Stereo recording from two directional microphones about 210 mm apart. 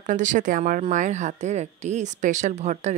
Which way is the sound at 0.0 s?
35° right (ahead or behind).